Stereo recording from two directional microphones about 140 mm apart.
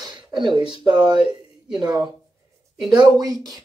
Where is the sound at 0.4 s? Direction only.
35° right (ahead or behind).